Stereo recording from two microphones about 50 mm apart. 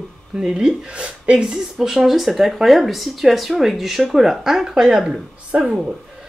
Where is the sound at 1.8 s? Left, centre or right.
Centre.